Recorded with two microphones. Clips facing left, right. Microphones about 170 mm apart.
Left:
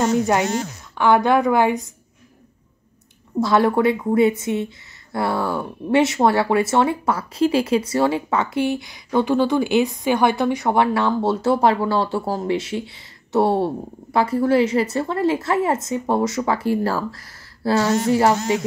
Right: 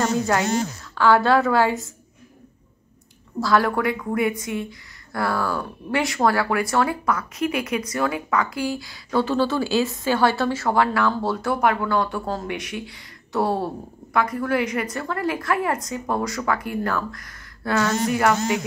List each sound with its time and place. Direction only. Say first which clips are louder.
0.0 s speech: left 3 dB; 20° left (ahead or behind)
3.3 s speech: left 3 dB; 20° left (ahead or behind)